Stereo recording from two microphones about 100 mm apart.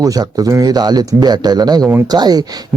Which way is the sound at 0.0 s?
40° right (ahead or behind).